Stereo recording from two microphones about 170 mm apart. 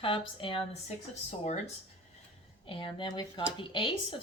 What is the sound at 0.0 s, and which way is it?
Speech, 30° left (ahead or behind).